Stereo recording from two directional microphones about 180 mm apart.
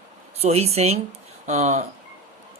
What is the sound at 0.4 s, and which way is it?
Speech, 35° right (ahead or behind).